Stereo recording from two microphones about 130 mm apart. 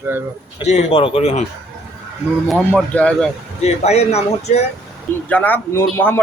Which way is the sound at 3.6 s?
55° left (ahead or behind).